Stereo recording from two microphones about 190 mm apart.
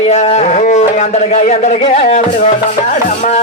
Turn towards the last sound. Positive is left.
turn(degrees=35)  # may be behind; listen again after turning